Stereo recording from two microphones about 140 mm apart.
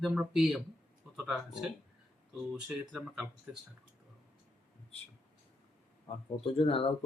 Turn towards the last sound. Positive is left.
turn(degrees=40)  # may be behind; listen again after turning